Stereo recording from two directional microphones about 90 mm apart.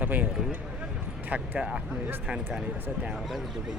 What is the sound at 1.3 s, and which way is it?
Speech, 10° right (ahead or behind).